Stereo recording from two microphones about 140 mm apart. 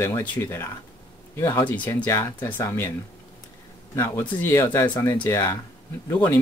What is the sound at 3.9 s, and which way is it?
Speech, 15° left (ahead or behind).